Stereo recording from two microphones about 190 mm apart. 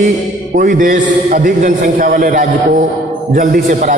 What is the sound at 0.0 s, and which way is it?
A man's voice, 40° right (ahead or behind).